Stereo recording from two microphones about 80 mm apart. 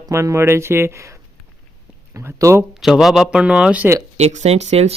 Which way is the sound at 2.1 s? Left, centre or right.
Right.